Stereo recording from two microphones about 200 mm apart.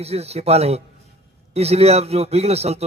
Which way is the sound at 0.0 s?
30° right (ahead or behind).